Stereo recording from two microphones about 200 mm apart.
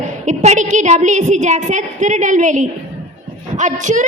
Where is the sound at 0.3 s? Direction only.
35° right (ahead or behind).